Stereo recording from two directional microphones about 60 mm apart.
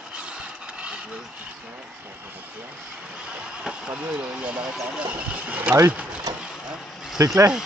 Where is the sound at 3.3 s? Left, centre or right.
Centre.